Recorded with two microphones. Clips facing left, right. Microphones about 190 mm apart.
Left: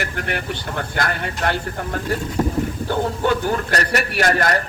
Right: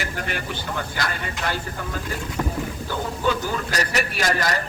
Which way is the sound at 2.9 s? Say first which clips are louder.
Left 4 dB; 60° left (ahead or behind).